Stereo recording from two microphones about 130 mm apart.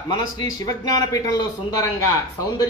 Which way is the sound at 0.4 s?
30° left (ahead or behind).